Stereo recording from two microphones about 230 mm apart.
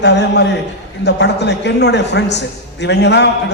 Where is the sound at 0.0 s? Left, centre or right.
Left.